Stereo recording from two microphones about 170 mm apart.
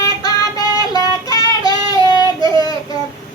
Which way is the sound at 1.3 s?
20° left (ahead or behind).